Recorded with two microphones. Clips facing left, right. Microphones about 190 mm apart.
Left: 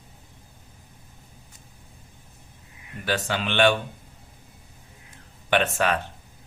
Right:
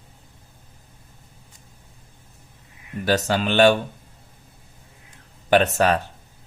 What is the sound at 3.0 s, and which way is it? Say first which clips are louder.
Speech: right 6 dB; 40° right (ahead or behind).